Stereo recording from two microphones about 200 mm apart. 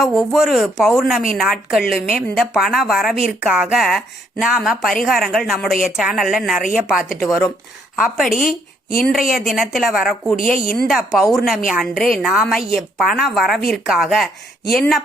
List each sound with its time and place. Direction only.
0.0 s a woman's voice: centre (ahead or behind)
8.9 s speech: 45° left (ahead or behind)
9.5 s a woman's voice: centre (ahead or behind)